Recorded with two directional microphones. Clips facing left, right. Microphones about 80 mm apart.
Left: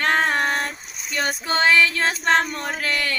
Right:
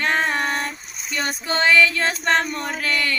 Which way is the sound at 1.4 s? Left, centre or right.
Left.